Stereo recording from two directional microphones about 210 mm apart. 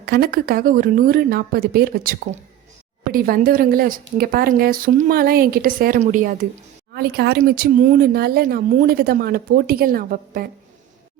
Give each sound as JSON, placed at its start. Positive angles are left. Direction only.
{"t": 0.0, "sound": "speech", "side_deg": -45}
{"t": 6.9, "sound": "speech", "side_deg": -50}